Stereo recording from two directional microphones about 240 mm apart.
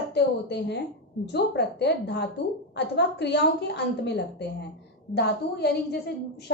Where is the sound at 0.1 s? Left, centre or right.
Left.